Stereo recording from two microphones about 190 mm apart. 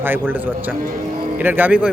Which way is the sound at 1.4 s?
10° right (ahead or behind).